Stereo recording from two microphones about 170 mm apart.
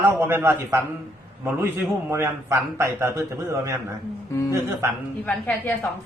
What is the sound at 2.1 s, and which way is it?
A man's voice, 15° right (ahead or behind).